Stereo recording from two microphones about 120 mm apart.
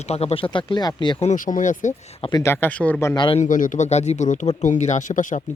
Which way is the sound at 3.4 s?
90° left.